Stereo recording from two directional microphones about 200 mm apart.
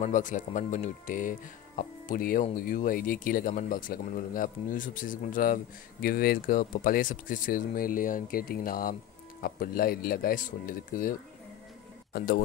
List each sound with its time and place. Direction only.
0.0 s speech: 40° left (ahead or behind)